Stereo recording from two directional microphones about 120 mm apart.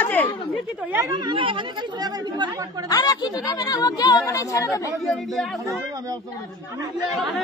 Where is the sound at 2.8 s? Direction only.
30° left (ahead or behind).